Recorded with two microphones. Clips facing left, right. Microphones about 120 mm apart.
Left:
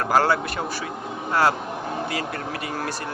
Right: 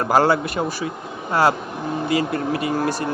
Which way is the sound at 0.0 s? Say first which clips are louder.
Right 3 dB; 15° right (ahead or behind).